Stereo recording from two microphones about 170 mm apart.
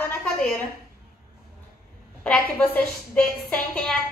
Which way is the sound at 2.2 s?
10° left (ahead or behind).